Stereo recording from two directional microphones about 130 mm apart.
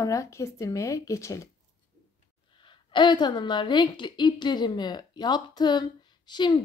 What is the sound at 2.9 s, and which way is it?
A woman's voice, 35° left (ahead or behind).